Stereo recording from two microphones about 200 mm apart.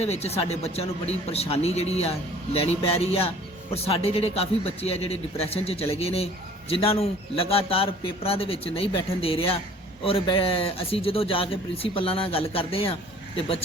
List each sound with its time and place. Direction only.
0.0 s speech: 30° left (ahead or behind)